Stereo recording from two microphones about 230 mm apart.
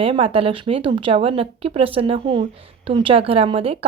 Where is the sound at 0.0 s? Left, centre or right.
Right.